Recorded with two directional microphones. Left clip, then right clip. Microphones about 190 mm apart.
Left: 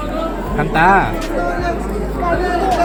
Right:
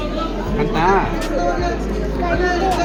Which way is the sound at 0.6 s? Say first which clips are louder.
Left 4 dB; 50° left (ahead or behind).